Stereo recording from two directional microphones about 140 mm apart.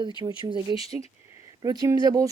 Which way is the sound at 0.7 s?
30° right (ahead or behind).